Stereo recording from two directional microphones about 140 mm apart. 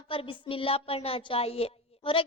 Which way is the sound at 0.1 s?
40° left (ahead or behind).